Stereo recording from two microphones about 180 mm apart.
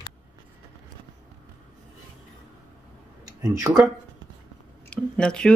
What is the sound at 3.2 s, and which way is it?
Speech, 20° right (ahead or behind).